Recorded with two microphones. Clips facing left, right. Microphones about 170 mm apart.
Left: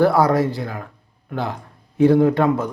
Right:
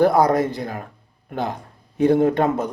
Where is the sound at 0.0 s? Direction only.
20° right (ahead or behind).